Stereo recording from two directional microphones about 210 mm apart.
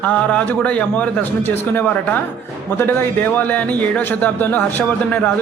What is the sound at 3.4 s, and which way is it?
A man's voice, 5° left (ahead or behind).